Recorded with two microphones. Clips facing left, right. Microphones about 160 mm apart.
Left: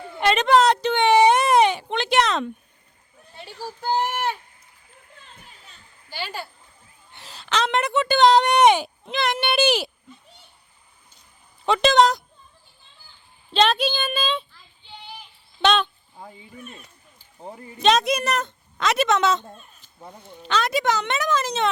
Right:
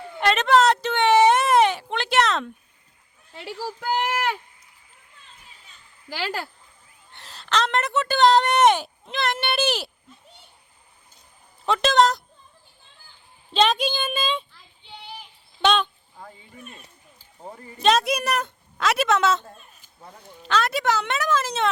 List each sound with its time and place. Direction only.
0.2 s a sound: centre (ahead or behind)
3.3 s speech: 90° right
6.1 s speech: 90° right
7.1 s a woman's voice: centre (ahead or behind)
11.6 s speech: centre (ahead or behind)
13.5 s a woman's voice: 10° right (ahead or behind)
15.6 s a woman's voice: 10° right (ahead or behind)
17.8 s a woman's voice: 5° right (ahead or behind)